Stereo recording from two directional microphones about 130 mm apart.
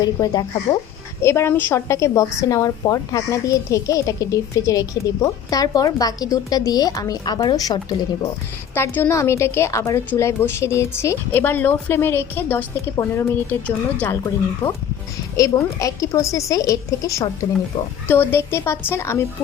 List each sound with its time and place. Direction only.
0.0 s a woman's voice: 30° left (ahead or behind)
8.7 s a woman's voice: 20° left (ahead or behind)
15.4 s a woman's voice: 25° left (ahead or behind)